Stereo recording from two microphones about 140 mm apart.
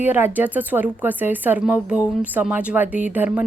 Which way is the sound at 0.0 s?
15° right (ahead or behind).